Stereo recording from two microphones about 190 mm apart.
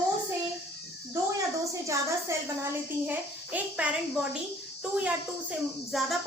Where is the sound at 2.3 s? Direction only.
15° right (ahead or behind).